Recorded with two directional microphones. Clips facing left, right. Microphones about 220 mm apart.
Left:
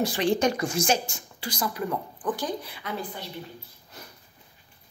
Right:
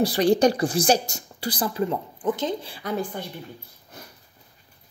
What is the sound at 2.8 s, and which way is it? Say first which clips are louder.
Speech: right 6 dB; 50° right (ahead or behind).